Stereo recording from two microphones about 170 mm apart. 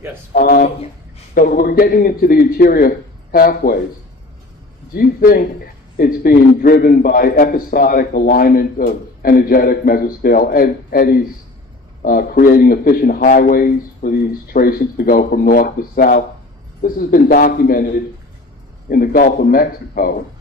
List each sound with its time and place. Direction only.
0.3 s a man's voice: 55° left (ahead or behind)
4.9 s a man's voice: 55° left (ahead or behind)